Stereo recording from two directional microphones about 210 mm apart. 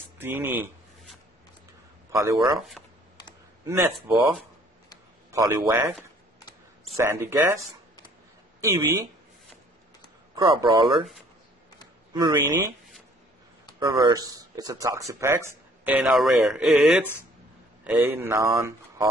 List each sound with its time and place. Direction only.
0.2 s a sound: 10° right (ahead or behind)
2.1 s speech: 15° right (ahead or behind)
3.6 s speech: 15° right (ahead or behind)
5.3 s speech: 15° right (ahead or behind)
7.0 s speech: 10° right (ahead or behind)
8.5 s speech: 15° right (ahead or behind)
10.3 s speech: 15° right (ahead or behind)
12.1 s speech: 20° right (ahead or behind)
13.7 s speech: 20° right (ahead or behind)